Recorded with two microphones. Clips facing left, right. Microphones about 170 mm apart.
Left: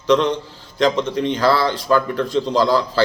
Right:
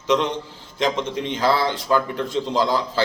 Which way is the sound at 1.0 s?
20° right (ahead or behind).